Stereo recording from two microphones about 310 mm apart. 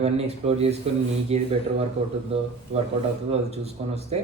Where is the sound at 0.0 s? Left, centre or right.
Centre.